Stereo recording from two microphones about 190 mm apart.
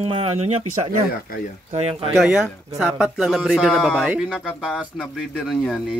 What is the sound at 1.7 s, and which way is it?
Speech, 35° right (ahead or behind).